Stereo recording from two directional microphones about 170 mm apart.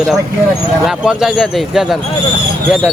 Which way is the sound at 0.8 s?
Centre (ahead or behind).